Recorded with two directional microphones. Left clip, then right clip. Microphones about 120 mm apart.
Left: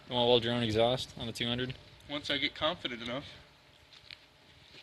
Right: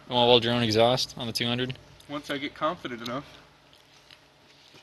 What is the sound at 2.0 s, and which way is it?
Speech, 20° left (ahead or behind).